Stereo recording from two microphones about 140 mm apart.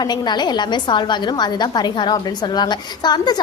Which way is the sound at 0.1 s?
30° left (ahead or behind).